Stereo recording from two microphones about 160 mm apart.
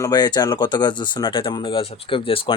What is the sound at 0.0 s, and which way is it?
Speech, 25° left (ahead or behind).